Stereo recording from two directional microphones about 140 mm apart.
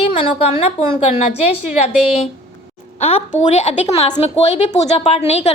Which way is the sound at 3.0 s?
50° left (ahead or behind).